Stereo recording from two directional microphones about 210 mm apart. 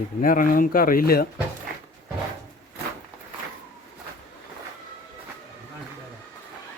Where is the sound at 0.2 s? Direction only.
40° left (ahead or behind).